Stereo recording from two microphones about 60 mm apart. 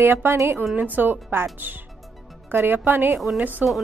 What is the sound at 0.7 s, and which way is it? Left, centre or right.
Speech, right.